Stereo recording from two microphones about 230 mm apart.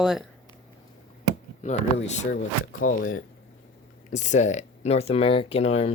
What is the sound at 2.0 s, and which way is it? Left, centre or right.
Speech, left.